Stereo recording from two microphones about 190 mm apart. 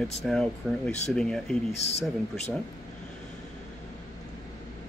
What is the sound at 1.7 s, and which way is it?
Speech, 35° left (ahead or behind).